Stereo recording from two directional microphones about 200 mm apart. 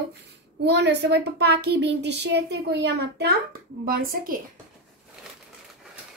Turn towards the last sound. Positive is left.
turn(degrees=-45)  # may be behind; listen again after turning